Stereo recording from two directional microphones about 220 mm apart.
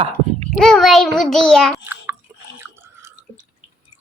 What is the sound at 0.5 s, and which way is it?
A child's voice, centre (ahead or behind).